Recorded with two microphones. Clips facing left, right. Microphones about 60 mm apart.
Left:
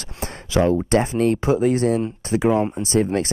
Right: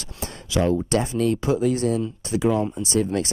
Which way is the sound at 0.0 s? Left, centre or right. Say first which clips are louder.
Left 3 dB; left.